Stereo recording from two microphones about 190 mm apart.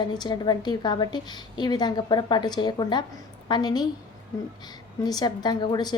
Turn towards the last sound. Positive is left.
turn(degrees=20)  # may be behind; listen again after turning